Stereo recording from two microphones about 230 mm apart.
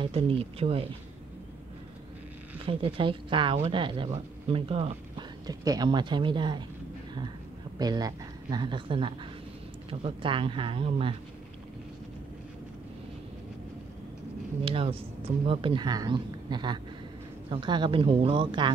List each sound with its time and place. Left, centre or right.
0.0 s speech: right
2.6 s speech: right
7.8 s speech: centre
14.6 s speech: right